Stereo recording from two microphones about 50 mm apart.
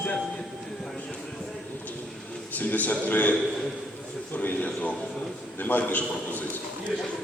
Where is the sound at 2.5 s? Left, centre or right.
Left.